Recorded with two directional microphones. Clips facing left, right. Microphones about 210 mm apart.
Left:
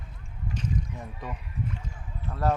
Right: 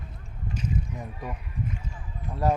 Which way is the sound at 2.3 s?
15° right (ahead or behind).